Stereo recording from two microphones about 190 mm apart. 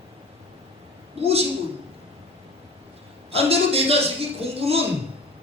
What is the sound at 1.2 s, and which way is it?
Speech, 30° right (ahead or behind).